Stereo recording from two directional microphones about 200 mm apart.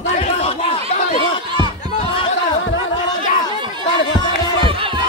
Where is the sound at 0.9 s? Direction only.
35° left (ahead or behind).